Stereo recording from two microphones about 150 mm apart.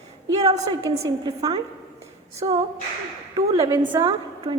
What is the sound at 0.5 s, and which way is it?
A woman's voice, 25° right (ahead or behind).